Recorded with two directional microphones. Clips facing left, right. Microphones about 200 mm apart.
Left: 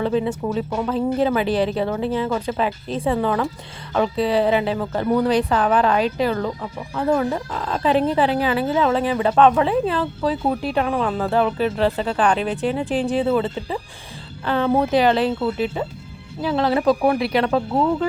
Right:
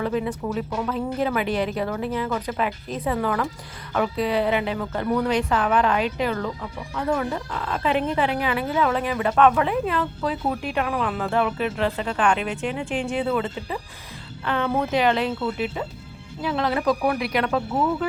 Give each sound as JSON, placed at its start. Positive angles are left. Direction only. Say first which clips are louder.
{"t": 0.0, "sound": "speech", "louder": "left 4 dB", "side_deg": 30}